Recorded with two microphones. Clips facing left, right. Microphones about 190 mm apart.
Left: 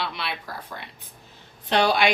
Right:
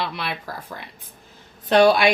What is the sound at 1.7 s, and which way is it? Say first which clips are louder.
Speech: right 6 dB; 50° right (ahead or behind).